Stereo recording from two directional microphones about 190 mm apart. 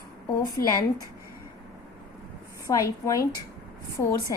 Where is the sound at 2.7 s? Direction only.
15° left (ahead or behind).